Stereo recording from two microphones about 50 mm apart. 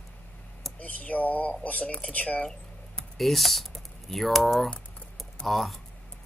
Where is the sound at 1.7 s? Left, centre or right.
Left.